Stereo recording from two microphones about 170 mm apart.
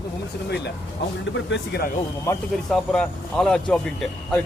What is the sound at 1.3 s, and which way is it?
Speech, 80° left.